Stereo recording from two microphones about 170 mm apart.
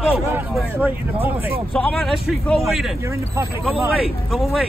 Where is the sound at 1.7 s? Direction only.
5° left (ahead or behind).